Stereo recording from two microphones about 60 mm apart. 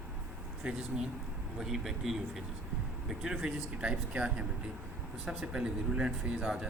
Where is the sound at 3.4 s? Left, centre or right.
Centre.